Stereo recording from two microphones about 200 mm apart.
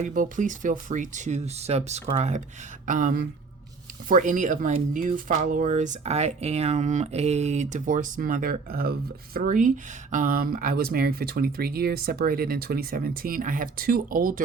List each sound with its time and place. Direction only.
0.0 s speech: 40° right (ahead or behind)